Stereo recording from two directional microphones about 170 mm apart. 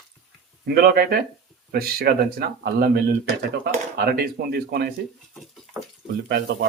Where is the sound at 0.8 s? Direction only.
65° right (ahead or behind).